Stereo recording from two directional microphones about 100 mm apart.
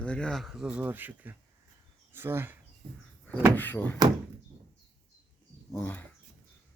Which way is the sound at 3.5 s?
20° left (ahead or behind).